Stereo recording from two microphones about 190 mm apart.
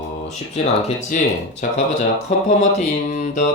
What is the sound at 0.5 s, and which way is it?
Speech, 35° left (ahead or behind).